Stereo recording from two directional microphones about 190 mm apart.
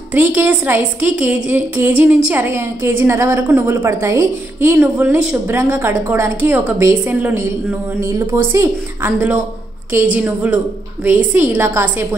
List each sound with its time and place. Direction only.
0.1 s a woman's voice: 10° right (ahead or behind)